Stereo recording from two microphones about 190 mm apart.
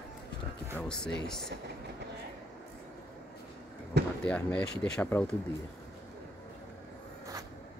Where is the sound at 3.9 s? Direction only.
60° right (ahead or behind).